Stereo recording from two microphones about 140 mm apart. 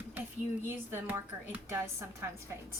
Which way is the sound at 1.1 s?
20° right (ahead or behind).